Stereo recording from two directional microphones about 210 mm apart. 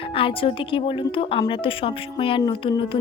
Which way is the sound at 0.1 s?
25° left (ahead or behind).